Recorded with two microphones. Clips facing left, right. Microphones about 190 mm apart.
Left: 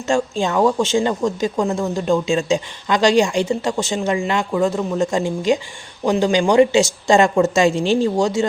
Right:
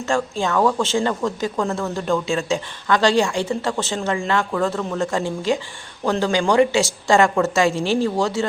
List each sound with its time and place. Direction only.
0.1 s speech: 15° left (ahead or behind)